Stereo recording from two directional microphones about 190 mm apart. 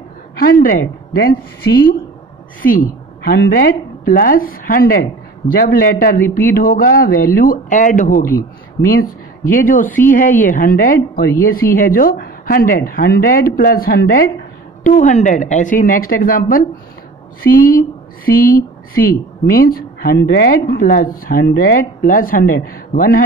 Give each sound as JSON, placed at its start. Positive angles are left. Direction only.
{"t": 0.4, "sound": "speech", "side_deg": 50}
{"t": 2.6, "sound": "speech", "side_deg": 50}